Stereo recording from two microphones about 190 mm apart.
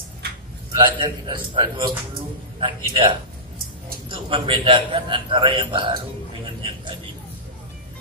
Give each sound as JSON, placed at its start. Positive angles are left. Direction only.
{"t": 0.7, "sound": "a man's voice", "side_deg": -25}
{"t": 4.1, "sound": "a man's voice", "side_deg": -25}